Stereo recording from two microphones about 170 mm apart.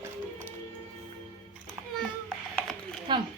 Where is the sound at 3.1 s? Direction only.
30° right (ahead or behind).